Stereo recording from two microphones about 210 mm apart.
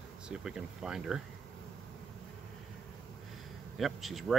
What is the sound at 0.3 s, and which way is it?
Speech, 5° right (ahead or behind).